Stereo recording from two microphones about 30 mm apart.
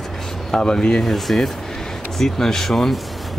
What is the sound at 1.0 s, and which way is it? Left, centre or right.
Speech, centre.